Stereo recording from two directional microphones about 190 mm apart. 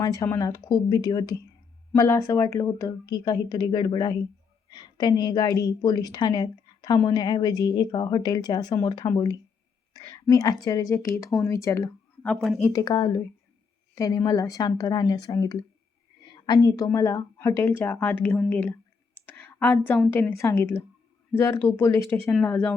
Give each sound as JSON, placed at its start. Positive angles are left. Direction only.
{"t": 0.0, "sound": "a woman's voice", "side_deg": 20}
{"t": 12.3, "sound": "speech", "side_deg": 0}
{"t": 12.5, "sound": "a woman's voice", "side_deg": 15}
{"t": 19.2, "sound": "a sound", "side_deg": 10}
{"t": 20.1, "sound": "a woman's voice", "side_deg": 10}